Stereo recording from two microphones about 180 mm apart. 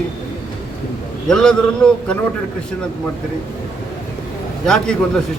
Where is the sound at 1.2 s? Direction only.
5° left (ahead or behind).